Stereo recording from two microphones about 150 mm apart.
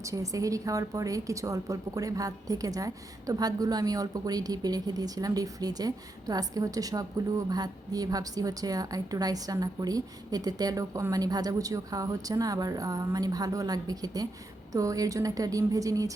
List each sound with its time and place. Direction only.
0.0 s a woman's voice: 20° right (ahead or behind)